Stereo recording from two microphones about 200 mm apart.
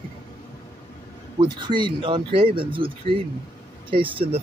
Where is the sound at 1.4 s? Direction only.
25° right (ahead or behind).